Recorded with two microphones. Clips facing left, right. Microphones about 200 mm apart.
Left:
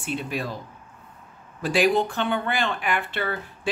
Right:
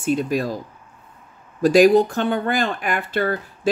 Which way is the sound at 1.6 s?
40° right (ahead or behind).